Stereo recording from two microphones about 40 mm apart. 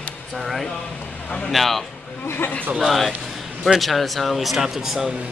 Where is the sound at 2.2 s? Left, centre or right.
Left.